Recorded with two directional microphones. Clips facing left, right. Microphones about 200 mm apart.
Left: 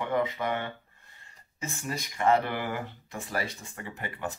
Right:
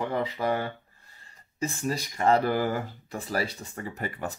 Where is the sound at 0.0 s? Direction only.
35° right (ahead or behind).